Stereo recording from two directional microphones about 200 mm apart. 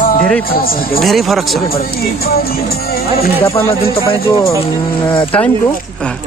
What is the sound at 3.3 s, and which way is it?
Speech, 10° left (ahead or behind).